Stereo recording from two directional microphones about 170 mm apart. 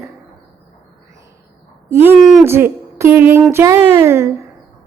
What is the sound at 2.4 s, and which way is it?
A woman's voice, 15° right (ahead or behind).